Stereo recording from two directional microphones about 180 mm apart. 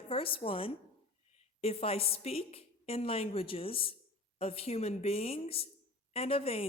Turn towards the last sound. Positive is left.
turn(degrees=30)  # may be behind; listen again after turning